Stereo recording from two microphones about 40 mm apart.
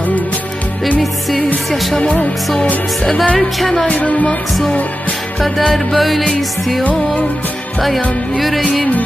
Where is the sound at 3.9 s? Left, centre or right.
Left.